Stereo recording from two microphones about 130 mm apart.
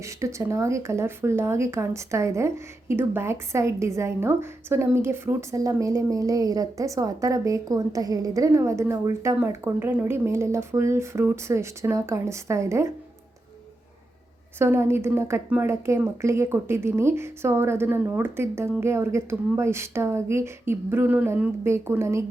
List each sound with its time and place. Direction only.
0.0 s a woman's voice: 20° right (ahead or behind)
14.6 s a woman's voice: 20° right (ahead or behind)